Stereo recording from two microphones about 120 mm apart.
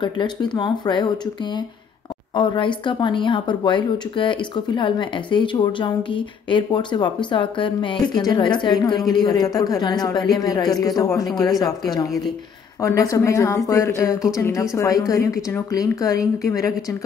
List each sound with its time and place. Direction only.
0.0 s a woman's voice: 40° left (ahead or behind)